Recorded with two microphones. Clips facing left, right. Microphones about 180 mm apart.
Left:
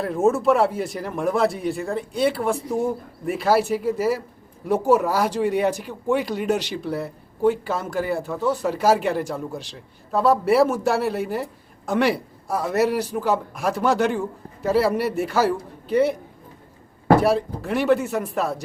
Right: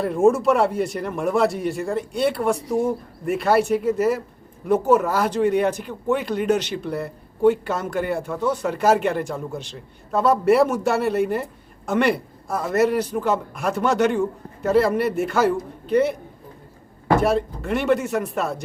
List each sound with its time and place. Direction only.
0.0 s speech: centre (ahead or behind)
17.2 s speech: 5° left (ahead or behind)